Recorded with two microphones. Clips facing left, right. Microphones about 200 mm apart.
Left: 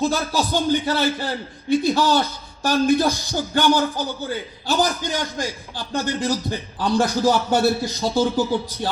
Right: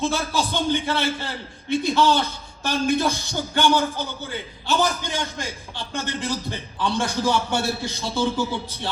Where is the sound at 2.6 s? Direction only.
35° left (ahead or behind).